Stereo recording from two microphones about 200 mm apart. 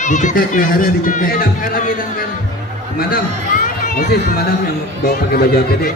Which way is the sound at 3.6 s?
40° left (ahead or behind).